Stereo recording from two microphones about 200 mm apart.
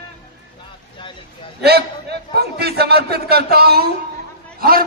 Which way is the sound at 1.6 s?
55° right (ahead or behind).